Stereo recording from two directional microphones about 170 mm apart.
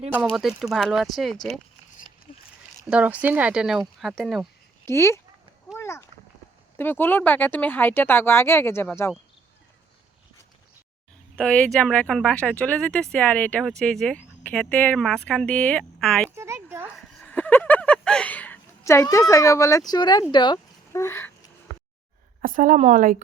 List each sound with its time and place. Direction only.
0.1 s speech: 5° right (ahead or behind)
2.8 s speech: 10° right (ahead or behind)
4.9 s speech: 15° left (ahead or behind)
5.7 s a sound: 15° left (ahead or behind)
6.7 s speech: 10° left (ahead or behind)
11.3 s speech: 5° left (ahead or behind)
16.3 s a sound: 15° right (ahead or behind)
16.9 s a sound: 5° left (ahead or behind)
19.3 s speech: 20° left (ahead or behind)
22.4 s a woman's voice: 55° right (ahead or behind)